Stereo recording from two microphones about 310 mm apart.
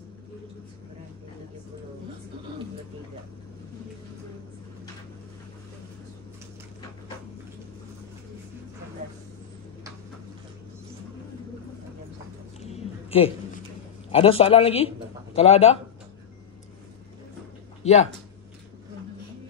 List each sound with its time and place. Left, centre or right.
12.6 s a sound: centre
14.1 s a man's voice: centre
17.8 s speech: left